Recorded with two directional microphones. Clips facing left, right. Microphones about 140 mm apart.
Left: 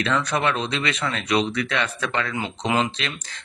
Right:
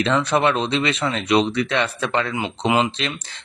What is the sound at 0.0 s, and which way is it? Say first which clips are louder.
Speech: right 4 dB; 25° right (ahead or behind).